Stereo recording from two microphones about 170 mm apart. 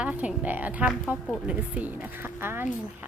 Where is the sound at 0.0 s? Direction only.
5° right (ahead or behind).